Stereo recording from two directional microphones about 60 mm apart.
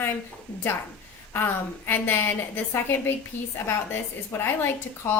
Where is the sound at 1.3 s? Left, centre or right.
Left.